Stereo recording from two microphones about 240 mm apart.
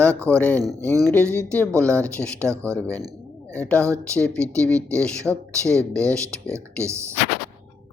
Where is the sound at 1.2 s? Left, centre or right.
Centre.